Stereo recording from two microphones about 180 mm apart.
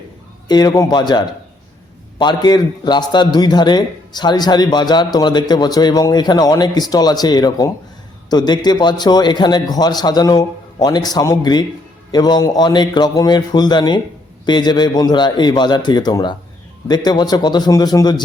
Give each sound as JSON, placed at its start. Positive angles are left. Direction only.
{"t": 0.4, "sound": "a man's voice", "side_deg": 20}